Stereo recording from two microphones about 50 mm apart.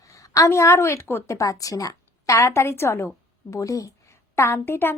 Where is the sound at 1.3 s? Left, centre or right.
Left.